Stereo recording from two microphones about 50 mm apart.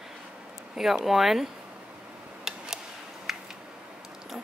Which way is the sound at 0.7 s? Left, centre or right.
Centre.